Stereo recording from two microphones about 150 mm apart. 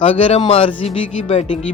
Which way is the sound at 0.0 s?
35° left (ahead or behind).